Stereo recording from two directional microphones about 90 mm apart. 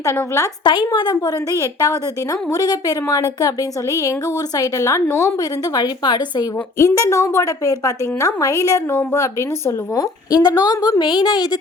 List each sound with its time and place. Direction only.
0.0 s a woman's voice: 35° left (ahead or behind)
0.6 s a woman's voice: 60° left (ahead or behind)
1.5 s a woman's voice: 40° left (ahead or behind)
4.5 s a woman's voice: 35° left (ahead or behind)
5.7 s a woman's voice: 55° left (ahead or behind)
6.7 s a woman's voice: 35° left (ahead or behind); by 11.4 s 50° left (ahead or behind)